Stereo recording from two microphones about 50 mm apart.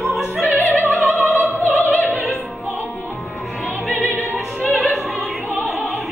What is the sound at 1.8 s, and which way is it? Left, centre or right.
Opera, left.